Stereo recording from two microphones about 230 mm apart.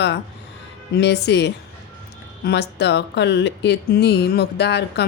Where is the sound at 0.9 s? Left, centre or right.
Left.